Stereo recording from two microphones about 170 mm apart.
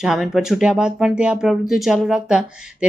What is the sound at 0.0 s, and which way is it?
Speech, centre (ahead or behind).